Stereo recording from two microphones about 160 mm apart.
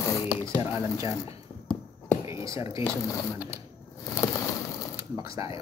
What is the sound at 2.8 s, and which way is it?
Speech, 20° left (ahead or behind).